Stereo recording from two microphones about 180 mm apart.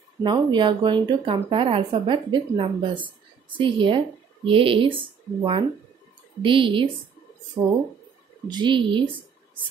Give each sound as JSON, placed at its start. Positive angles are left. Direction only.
{"t": 0.2, "sound": "speech", "side_deg": -25}
{"t": 8.5, "sound": "speech", "side_deg": -25}